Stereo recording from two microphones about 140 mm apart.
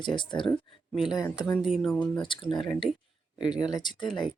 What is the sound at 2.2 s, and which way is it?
Speech, 35° left (ahead or behind).